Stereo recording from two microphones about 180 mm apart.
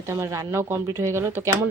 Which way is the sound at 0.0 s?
15° right (ahead or behind).